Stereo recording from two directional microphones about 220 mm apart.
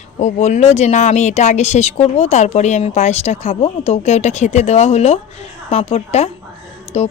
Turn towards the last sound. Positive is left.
turn(degrees=30)  # may be behind; listen again after turning